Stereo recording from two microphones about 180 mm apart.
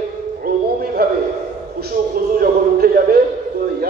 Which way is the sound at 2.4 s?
55° right (ahead or behind).